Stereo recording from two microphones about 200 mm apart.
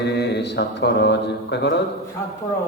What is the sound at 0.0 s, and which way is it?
Speech, 55° left (ahead or behind).